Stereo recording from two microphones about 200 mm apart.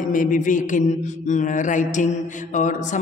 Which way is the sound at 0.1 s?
40° left (ahead or behind).